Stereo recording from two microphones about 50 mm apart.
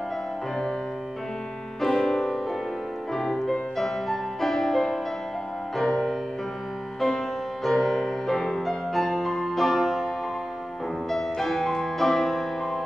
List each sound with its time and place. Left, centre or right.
1.8 s music: centre
11.1 s music: centre